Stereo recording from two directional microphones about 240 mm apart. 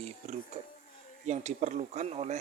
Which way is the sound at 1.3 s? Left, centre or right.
Right.